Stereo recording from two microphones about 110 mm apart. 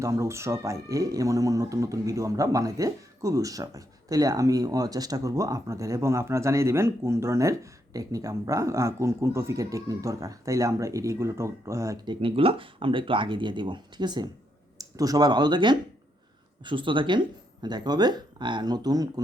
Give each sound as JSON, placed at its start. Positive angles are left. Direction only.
{"t": 0.0, "sound": "speech", "side_deg": -25}
{"t": 12.0, "sound": "speech", "side_deg": -55}